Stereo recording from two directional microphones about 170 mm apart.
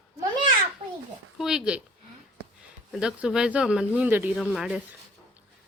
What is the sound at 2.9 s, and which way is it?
Speech, 5° right (ahead or behind).